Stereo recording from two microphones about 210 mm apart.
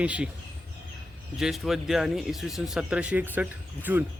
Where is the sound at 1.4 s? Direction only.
Centre (ahead or behind).